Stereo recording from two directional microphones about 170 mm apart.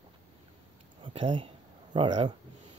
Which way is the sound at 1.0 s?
30° right (ahead or behind).